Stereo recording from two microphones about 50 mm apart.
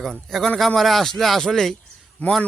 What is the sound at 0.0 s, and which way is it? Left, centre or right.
Speech, centre.